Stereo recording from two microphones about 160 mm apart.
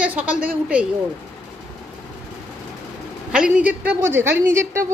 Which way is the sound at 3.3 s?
5° right (ahead or behind).